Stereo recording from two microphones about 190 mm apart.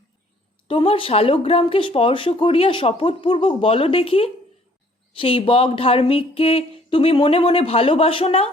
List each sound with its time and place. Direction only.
0.7 s speech: 25° left (ahead or behind)